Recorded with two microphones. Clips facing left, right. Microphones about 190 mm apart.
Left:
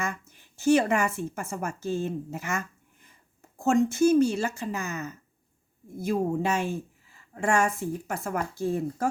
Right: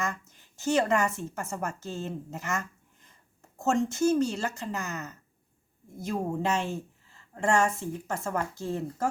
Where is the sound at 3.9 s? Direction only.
10° left (ahead or behind).